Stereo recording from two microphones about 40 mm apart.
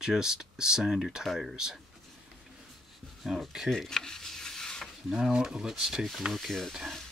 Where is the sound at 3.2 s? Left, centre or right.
Centre.